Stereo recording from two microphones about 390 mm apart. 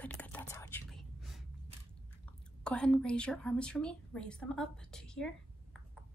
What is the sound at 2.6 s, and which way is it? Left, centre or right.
A woman's voice, centre.